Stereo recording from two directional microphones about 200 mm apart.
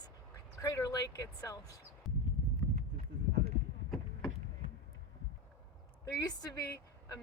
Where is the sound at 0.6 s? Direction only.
15° left (ahead or behind).